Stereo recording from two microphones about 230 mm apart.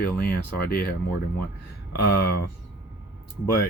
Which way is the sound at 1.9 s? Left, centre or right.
Left.